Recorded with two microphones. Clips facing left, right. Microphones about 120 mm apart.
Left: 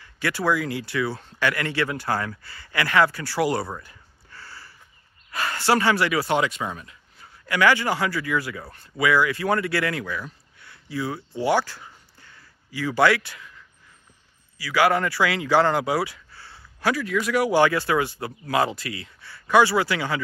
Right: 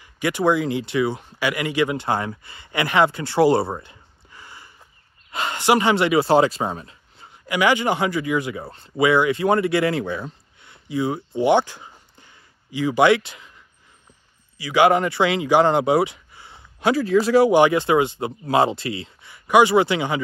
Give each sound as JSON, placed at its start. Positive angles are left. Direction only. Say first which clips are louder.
{"t": 0.0, "sound": "speech", "louder": "right 5 dB", "side_deg": -20}
{"t": 7.4, "sound": "speech", "louder": "right 1 dB", "side_deg": -15}
{"t": 14.6, "sound": "speech", "louder": "right 4 dB", "side_deg": -20}